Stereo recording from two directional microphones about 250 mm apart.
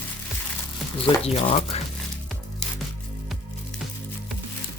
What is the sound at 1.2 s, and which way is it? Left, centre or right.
Speech, left.